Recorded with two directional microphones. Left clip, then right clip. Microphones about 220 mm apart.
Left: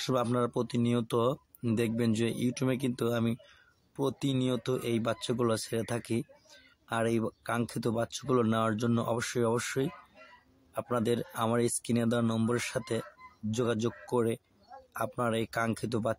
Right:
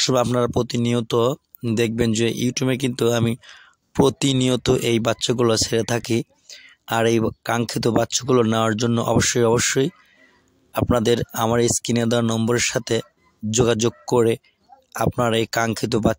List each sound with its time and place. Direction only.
0.0 s speech: 40° right (ahead or behind)